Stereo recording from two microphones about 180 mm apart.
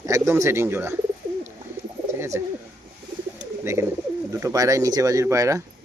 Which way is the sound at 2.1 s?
15° right (ahead or behind).